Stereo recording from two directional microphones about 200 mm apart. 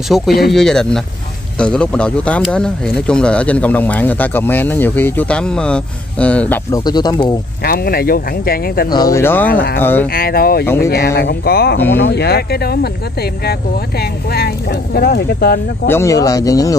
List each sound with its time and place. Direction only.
0.1 s speech: centre (ahead or behind)
6.8 s speech: 20° left (ahead or behind)
7.6 s speech: 45° left (ahead or behind)
8.9 s speech: 15° left (ahead or behind)
9.5 s speech: 45° left (ahead or behind)
9.8 s speech: 10° left (ahead or behind)
10.1 s speech: 50° left (ahead or behind)
10.6 s speech: 10° left (ahead or behind)
11.1 s speech: 50° left (ahead or behind)
15.9 s speech: 15° left (ahead or behind)